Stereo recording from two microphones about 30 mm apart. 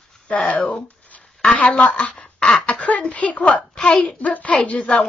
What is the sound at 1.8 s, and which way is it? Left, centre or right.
A woman's voice, left.